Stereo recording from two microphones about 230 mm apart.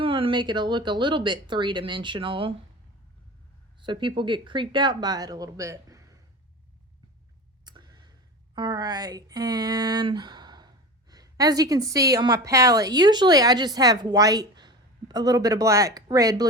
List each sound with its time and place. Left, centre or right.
0.0 s speech: right
3.8 s speech: right
7.6 s a sound: centre
8.5 s a woman's voice: centre